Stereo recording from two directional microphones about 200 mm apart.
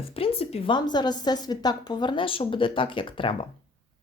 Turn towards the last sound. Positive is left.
turn(degrees=25)  # may be behind; listen again after turning